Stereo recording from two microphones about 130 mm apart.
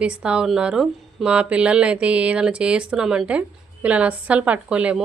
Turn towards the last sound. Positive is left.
turn(degrees=-10)  # may be behind; listen again after turning